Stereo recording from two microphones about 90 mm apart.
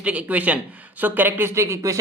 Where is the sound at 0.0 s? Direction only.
15° right (ahead or behind).